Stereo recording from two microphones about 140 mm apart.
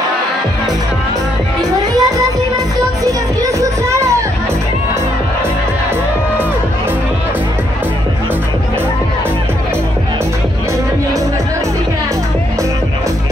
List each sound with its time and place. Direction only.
2.0 s music: 25° right (ahead or behind)